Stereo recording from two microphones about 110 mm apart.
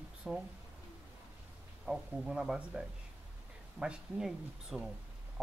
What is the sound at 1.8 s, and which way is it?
Speech, 5° right (ahead or behind).